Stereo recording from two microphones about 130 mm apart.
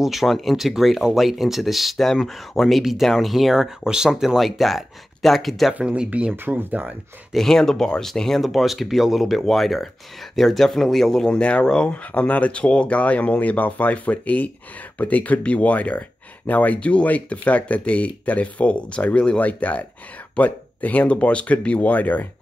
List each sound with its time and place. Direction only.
0.0 s speech: centre (ahead or behind)
7.3 s speech: 5° left (ahead or behind)